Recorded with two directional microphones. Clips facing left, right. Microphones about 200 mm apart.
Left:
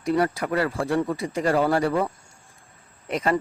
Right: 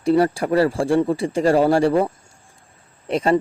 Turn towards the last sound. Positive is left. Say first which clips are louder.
# right 5 dB
turn(degrees=-30)  # may be behind; listen again after turning